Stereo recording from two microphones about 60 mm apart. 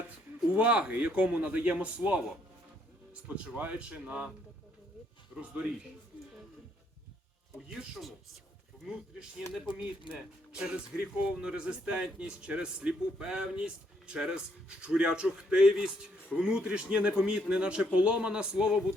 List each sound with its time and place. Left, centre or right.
0.5 s a man's voice: right
3.2 s a man's voice: right
9.7 s speech: centre